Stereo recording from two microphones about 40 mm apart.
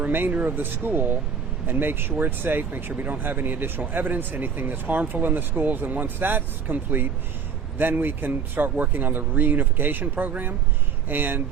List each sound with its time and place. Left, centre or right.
0.3 s speech: right